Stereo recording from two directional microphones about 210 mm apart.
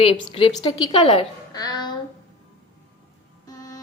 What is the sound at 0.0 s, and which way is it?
A woman's voice, 25° left (ahead or behind).